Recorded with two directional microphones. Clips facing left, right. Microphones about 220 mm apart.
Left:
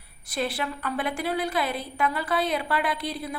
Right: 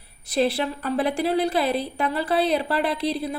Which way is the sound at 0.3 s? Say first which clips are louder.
Right 7 dB; 30° right (ahead or behind).